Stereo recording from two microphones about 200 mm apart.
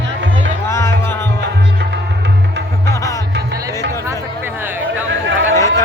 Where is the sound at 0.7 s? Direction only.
15° left (ahead or behind).